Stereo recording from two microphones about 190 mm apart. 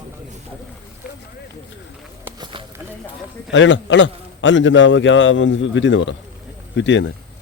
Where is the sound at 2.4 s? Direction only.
25° right (ahead or behind).